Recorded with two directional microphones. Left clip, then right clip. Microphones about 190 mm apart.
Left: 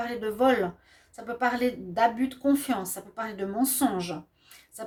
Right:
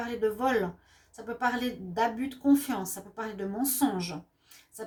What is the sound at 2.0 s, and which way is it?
A woman's voice, 40° left (ahead or behind).